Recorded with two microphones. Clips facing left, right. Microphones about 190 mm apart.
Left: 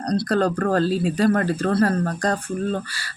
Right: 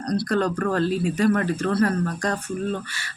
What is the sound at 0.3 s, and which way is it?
Speech, 35° left (ahead or behind).